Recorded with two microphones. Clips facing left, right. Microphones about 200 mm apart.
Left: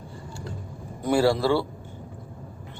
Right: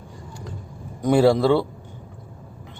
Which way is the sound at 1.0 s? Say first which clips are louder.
Right 5 dB; 20° right (ahead or behind).